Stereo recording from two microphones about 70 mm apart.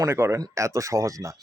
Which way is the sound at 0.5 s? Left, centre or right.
Right.